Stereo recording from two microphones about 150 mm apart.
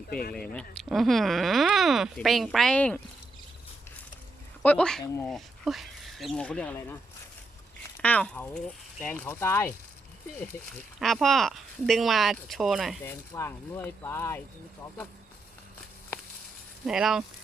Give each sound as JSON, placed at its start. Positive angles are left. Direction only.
{"t": 0.1, "sound": "speech", "side_deg": 80}
{"t": 0.5, "sound": "speech", "side_deg": 0}
{"t": 4.6, "sound": "speech", "side_deg": 10}
{"t": 8.0, "sound": "speech", "side_deg": 10}
{"t": 11.0, "sound": "speech", "side_deg": 0}
{"t": 13.1, "sound": "speech", "side_deg": 15}
{"t": 16.8, "sound": "speech", "side_deg": -5}